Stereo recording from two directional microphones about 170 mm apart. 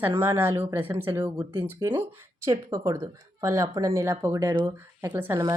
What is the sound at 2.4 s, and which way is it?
Speech, 20° right (ahead or behind).